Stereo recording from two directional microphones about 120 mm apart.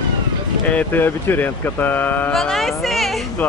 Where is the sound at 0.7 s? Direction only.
15° left (ahead or behind).